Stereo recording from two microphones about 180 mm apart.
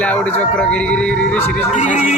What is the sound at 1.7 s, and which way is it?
Speech, 40° left (ahead or behind).